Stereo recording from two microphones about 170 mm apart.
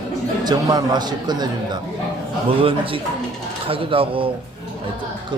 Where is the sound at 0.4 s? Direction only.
25° right (ahead or behind).